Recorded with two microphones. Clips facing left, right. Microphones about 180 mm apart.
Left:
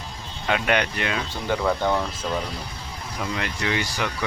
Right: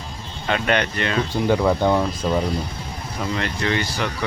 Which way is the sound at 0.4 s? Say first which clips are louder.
Right 2 dB; 10° left (ahead or behind).